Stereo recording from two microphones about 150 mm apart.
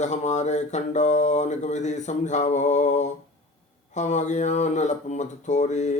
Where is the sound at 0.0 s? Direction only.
50° left (ahead or behind).